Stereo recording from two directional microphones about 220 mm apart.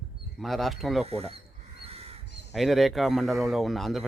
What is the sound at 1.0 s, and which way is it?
Speech, 25° right (ahead or behind).